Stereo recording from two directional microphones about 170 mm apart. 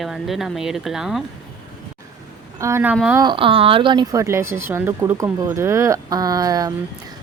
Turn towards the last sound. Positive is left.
turn(degrees=-20)  # may be behind; listen again after turning